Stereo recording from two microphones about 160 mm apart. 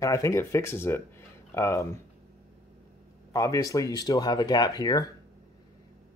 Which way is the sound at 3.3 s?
20° left (ahead or behind).